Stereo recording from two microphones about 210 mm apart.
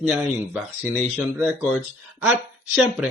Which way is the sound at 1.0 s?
Centre (ahead or behind).